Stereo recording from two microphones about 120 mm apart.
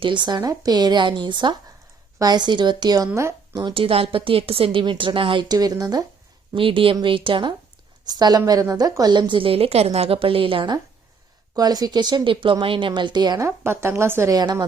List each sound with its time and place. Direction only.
0.0 s speech: 40° right (ahead or behind)
3.8 s a woman's voice: 50° right (ahead or behind); by 6.1 s 30° right (ahead or behind)
6.5 s a woman's voice: 45° right (ahead or behind)
11.5 s speech: 30° right (ahead or behind)
13.7 s a woman's voice: 20° right (ahead or behind)